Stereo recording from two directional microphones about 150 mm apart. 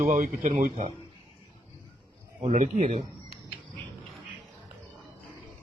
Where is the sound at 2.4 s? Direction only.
45° right (ahead or behind).